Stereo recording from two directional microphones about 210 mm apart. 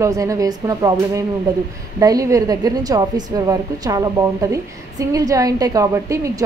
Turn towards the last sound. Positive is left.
turn(degrees=-15)  # may be behind; listen again after turning